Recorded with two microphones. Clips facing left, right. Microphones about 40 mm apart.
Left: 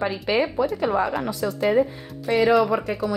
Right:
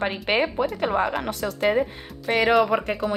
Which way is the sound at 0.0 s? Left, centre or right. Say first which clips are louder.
Left 1 dB; right.